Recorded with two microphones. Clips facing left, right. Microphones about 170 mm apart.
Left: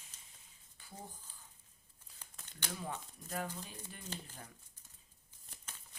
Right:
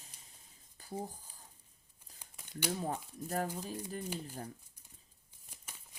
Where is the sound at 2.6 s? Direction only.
35° right (ahead or behind).